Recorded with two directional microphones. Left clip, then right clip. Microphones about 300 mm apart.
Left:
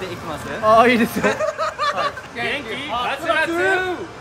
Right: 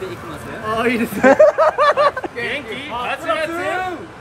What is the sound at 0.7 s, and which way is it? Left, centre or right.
Speech, left.